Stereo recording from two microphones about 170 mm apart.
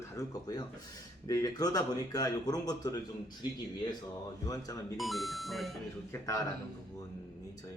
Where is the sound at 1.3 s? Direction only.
20° left (ahead or behind).